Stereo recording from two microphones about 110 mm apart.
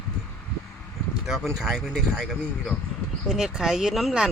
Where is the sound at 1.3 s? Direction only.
5° right (ahead or behind).